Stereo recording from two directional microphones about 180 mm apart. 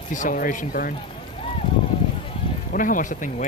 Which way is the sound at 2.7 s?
50° left (ahead or behind).